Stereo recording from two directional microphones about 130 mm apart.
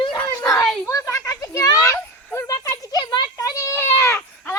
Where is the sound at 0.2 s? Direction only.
10° left (ahead or behind).